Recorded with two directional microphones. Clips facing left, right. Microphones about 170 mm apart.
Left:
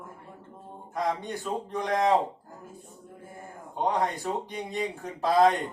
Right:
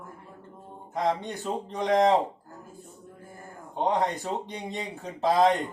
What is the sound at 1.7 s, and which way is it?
Speech, 20° right (ahead or behind).